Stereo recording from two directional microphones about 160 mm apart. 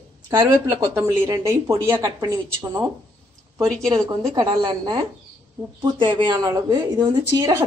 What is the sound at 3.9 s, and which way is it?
Speech, 20° right (ahead or behind).